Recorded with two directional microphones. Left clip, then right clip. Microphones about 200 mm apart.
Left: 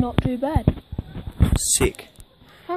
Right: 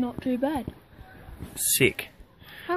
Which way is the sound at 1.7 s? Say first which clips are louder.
Right 1 dB; 5° left (ahead or behind).